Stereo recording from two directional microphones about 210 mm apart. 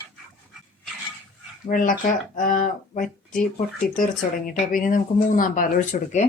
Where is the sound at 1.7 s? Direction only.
40° left (ahead or behind).